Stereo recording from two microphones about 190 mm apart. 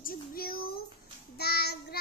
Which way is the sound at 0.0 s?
50° left (ahead or behind).